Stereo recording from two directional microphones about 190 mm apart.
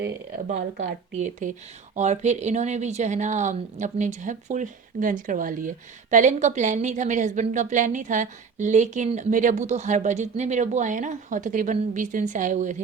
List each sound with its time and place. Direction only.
0.4 s a woman's voice: 40° right (ahead or behind)